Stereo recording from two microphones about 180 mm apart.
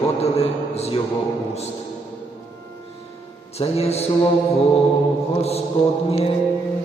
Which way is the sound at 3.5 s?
35° left (ahead or behind).